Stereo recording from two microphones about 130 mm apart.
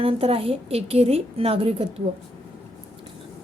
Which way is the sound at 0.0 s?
45° right (ahead or behind).